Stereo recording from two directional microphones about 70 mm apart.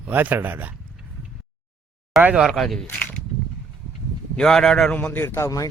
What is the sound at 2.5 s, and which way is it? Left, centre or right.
Speech, centre.